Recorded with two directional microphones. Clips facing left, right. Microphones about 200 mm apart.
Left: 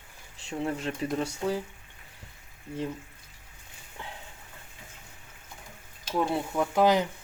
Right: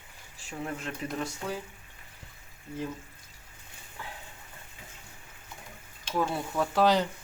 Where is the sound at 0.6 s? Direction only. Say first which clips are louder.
Left 5 dB; 30° left (ahead or behind).